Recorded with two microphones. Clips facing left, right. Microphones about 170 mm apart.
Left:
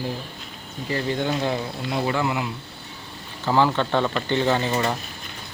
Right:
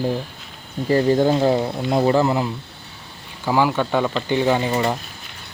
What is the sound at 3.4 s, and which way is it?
Speech, 10° right (ahead or behind).